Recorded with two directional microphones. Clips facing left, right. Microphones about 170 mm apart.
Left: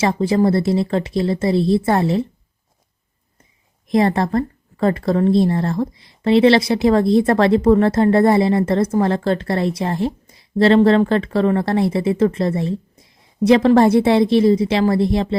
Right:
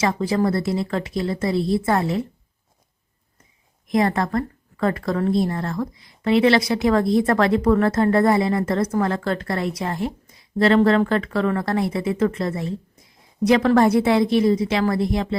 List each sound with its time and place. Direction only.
0.0 s speech: 25° left (ahead or behind)
3.8 s speech: 30° left (ahead or behind)